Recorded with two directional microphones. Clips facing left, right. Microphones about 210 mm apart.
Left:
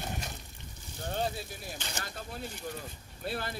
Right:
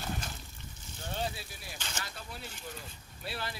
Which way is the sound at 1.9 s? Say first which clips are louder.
Left 3 dB; 45° left (ahead or behind).